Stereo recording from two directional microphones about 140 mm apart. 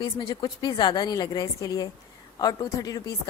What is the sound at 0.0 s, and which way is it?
A woman's voice, 30° left (ahead or behind).